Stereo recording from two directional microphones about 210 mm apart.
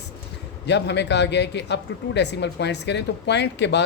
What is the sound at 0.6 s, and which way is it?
Speech, 55° left (ahead or behind).